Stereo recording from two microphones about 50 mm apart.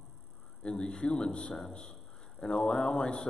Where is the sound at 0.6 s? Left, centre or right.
Centre.